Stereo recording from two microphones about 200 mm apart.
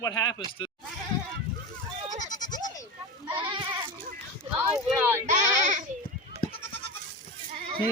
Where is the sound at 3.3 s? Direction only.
20° right (ahead or behind).